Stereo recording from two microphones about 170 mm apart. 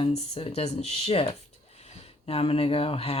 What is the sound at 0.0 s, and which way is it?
Speech, 35° left (ahead or behind).